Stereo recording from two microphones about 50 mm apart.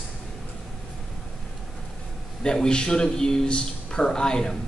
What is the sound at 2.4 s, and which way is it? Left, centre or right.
A man's voice, centre.